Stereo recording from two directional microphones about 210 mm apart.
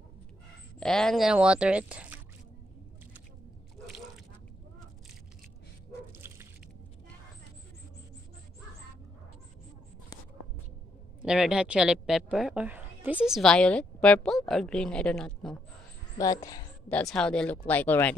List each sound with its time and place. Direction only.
0.7 s speech: 5° left (ahead or behind)
11.2 s speech: 5° right (ahead or behind)
16.2 s speech: 15° left (ahead or behind)
17.0 s speech: 5° left (ahead or behind)